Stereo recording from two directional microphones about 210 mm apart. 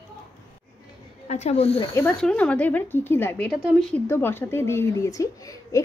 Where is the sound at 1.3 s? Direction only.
30° left (ahead or behind).